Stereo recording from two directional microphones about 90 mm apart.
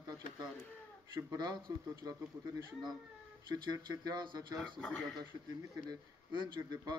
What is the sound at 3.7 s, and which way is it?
Speech, 55° right (ahead or behind).